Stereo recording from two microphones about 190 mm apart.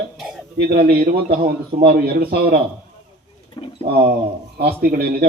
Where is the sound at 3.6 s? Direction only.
25° left (ahead or behind).